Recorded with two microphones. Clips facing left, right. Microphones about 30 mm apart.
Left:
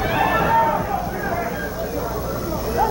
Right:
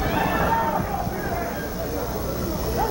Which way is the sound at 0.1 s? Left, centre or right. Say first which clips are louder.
Left 5 dB; centre.